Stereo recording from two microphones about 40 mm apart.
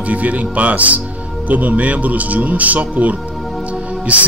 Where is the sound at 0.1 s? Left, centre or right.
Right.